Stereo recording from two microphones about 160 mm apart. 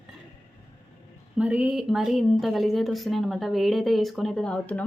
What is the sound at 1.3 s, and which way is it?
A woman's voice, 5° right (ahead or behind).